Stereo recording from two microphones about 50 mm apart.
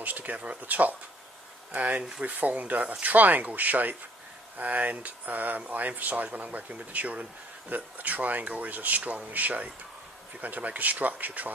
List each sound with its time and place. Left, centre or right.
0.0 s speech: right